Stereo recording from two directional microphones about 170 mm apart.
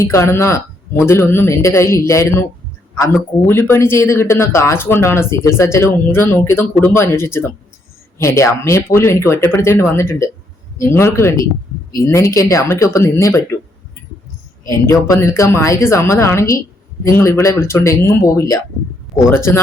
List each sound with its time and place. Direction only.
0.0 s speech: 15° left (ahead or behind)
3.4 s speech: 15° left (ahead or behind)
14.7 s speech: 15° left (ahead or behind)